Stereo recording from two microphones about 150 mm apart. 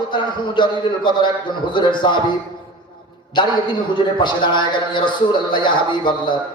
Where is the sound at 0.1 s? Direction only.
30° left (ahead or behind).